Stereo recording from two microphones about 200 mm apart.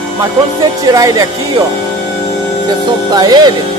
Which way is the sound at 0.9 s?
15° right (ahead or behind).